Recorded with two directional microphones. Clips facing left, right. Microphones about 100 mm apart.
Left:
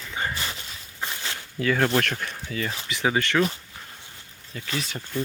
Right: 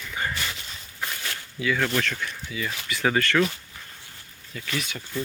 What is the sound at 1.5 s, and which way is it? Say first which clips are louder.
Speech: left 3 dB; 45° left (ahead or behind).